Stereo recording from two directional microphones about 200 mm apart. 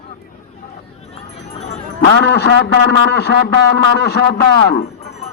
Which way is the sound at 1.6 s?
35° left (ahead or behind).